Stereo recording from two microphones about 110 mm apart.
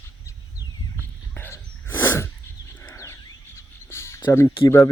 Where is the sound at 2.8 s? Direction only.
25° left (ahead or behind).